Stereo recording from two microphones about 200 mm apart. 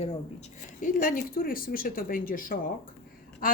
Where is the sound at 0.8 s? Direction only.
45° left (ahead or behind).